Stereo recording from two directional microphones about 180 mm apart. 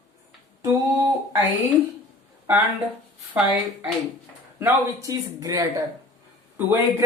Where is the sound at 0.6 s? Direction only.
15° right (ahead or behind).